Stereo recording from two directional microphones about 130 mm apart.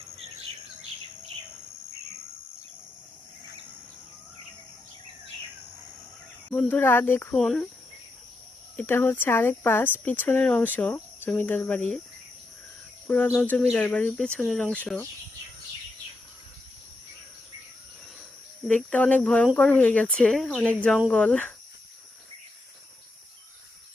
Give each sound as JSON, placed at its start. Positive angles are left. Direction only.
{"t": 0.2, "sound": "cricket", "side_deg": -50}
{"t": 6.5, "sound": "speech", "side_deg": 15}
{"t": 7.3, "sound": "speech", "side_deg": 5}
{"t": 8.7, "sound": "speech", "side_deg": 15}
{"t": 13.1, "sound": "cricket", "side_deg": 15}
{"t": 13.4, "sound": "speech", "side_deg": 10}
{"t": 18.7, "sound": "speech", "side_deg": 10}